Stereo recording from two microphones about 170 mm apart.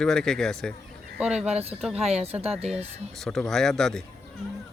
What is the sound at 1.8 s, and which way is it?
Speech, 5° right (ahead or behind).